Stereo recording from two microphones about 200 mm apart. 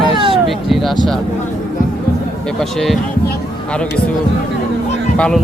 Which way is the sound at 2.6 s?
Centre (ahead or behind).